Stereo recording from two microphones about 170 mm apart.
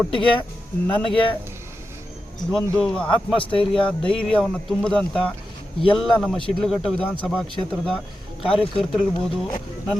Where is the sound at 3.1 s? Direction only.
30° left (ahead or behind).